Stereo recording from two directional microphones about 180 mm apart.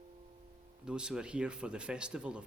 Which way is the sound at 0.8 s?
5° right (ahead or behind).